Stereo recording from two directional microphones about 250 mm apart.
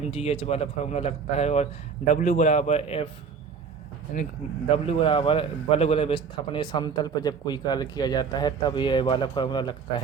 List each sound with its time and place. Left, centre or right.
0.0 s speech: left
4.7 s a man's voice: left